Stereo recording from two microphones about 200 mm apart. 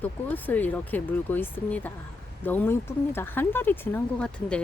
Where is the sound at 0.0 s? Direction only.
10° left (ahead or behind).